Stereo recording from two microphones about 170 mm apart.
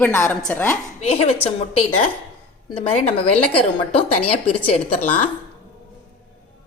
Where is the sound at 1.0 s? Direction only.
35° left (ahead or behind).